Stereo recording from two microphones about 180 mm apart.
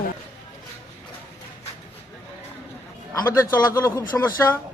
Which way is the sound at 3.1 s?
15° left (ahead or behind).